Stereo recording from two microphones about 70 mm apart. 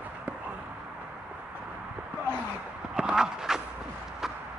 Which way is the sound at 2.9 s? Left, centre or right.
Centre.